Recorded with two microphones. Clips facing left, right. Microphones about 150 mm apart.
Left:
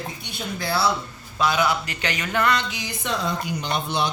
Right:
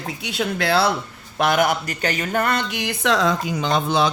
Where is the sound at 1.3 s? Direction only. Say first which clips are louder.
Right 3 dB; 55° right (ahead or behind).